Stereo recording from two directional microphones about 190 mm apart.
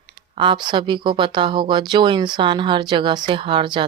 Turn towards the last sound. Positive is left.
turn(degrees=-25)  # may be behind; listen again after turning